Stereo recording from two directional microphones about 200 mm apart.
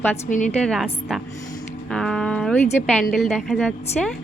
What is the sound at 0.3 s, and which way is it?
Speech, 40° left (ahead or behind).